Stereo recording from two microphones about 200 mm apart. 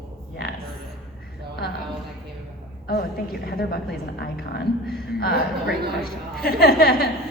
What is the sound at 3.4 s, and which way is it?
A woman's voice, 50° left (ahead or behind).